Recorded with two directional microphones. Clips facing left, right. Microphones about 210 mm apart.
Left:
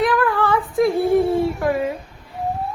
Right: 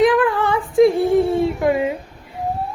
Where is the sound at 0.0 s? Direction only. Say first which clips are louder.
Right 3 dB; 20° right (ahead or behind).